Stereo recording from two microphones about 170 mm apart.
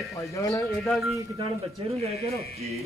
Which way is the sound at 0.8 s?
5° left (ahead or behind).